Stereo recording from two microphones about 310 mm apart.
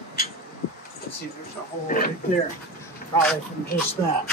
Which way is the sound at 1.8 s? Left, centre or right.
Left.